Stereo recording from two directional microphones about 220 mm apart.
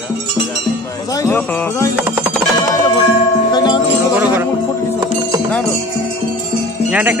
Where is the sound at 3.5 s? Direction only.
20° left (ahead or behind).